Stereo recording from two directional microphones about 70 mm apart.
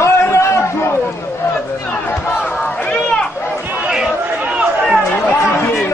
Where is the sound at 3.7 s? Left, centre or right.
Centre.